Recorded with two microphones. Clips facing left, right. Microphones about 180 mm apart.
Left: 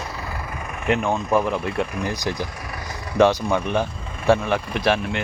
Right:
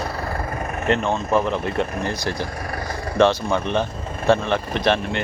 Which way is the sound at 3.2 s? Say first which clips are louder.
Even; 15° left (ahead or behind).